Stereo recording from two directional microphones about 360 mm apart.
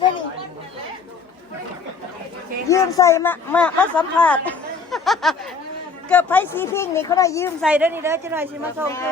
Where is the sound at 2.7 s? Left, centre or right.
Centre.